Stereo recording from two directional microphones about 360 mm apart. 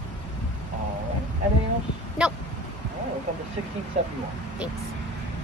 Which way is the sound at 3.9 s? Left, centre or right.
Centre.